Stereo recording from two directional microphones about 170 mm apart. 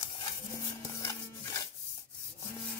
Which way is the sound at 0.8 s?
20° left (ahead or behind).